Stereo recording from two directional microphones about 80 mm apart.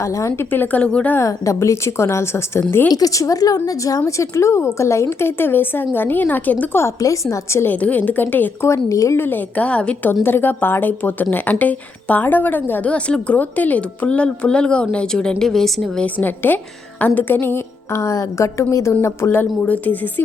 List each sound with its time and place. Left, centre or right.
0.0 s a woman's voice: left
0.5 s speech: left
1.2 s a woman's voice: left
2.9 s a woman's voice: left
7.0 s a woman's voice: left
7.6 s speech: left
8.6 s a woman's voice: left
9.1 s speech: left; by 16.0 s centre
16.0 s a woman's voice: left